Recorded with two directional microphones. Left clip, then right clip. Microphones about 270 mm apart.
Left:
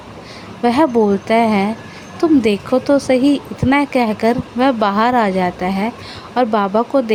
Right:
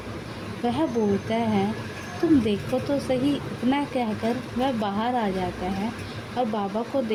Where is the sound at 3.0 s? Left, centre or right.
Left.